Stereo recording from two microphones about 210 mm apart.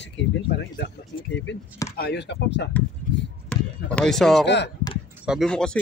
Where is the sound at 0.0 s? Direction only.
55° left (ahead or behind).